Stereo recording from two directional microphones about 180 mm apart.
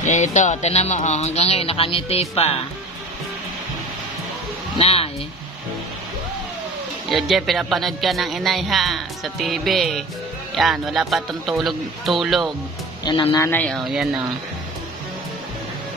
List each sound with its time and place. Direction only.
0.0 s speech: 40° left (ahead or behind)
4.7 s speech: 35° left (ahead or behind)
7.1 s speech: centre (ahead or behind)
13.0 s speech: 25° left (ahead or behind)
13.4 s speech: 10° left (ahead or behind)